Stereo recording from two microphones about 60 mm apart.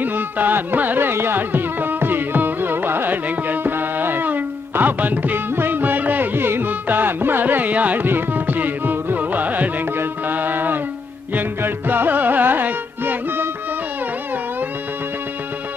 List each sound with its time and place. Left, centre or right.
0.0 s music: right